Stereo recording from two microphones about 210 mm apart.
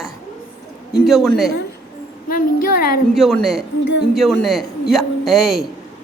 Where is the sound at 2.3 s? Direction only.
45° left (ahead or behind).